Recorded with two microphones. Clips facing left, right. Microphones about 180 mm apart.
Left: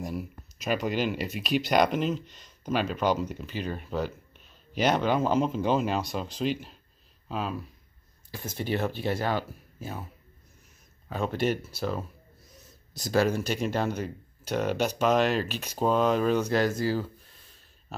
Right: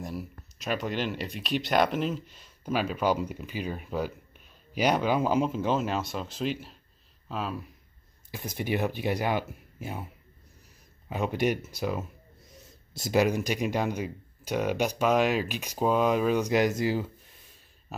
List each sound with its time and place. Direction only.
0.0 s speech: centre (ahead or behind)
8.5 s speech: 15° right (ahead or behind)
11.1 s speech: 15° right (ahead or behind)
12.5 s speech: 25° right (ahead or behind)